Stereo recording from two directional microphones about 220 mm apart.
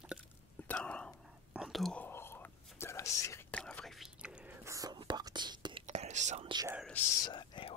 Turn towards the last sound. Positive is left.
turn(degrees=20)  # may be behind; listen again after turning